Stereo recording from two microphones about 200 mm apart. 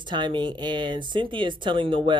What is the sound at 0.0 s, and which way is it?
Speech, 25° right (ahead or behind).